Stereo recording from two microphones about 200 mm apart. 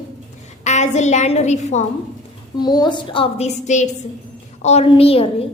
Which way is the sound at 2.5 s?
20° left (ahead or behind).